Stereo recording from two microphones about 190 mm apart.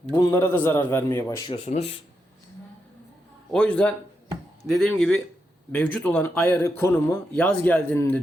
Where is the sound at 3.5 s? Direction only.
5° left (ahead or behind).